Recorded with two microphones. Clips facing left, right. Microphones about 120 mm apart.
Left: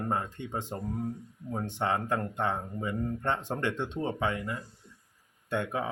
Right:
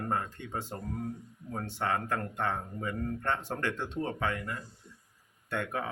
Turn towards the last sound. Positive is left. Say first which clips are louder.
# left 3 dB
turn(degrees=20)  # may be behind; listen again after turning